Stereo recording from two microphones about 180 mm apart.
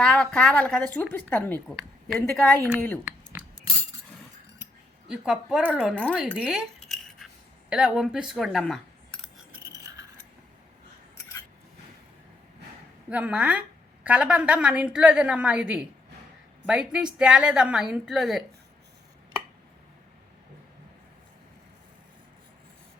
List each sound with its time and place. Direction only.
0.0 s a woman's voice: 5° left (ahead or behind)
3.0 s a sound: 10° right (ahead or behind)
5.0 s a woman's voice: 5° right (ahead or behind)
5.9 s a woman's voice: 10° left (ahead or behind)
6.3 s cutlery: 5° right (ahead or behind)
7.7 s speech: 5° right (ahead or behind)
9.8 s filing: 20° right (ahead or behind)
13.1 s a woman's voice: 5° right (ahead or behind)